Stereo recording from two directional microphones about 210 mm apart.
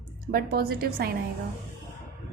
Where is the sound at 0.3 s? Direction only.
45° right (ahead or behind).